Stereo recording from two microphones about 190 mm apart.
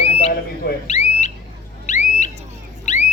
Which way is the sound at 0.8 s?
35° left (ahead or behind).